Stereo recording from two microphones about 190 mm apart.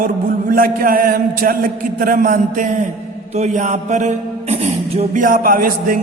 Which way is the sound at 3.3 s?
40° right (ahead or behind).